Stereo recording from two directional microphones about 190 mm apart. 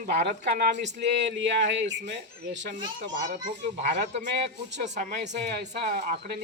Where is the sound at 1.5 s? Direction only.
70° right (ahead or behind).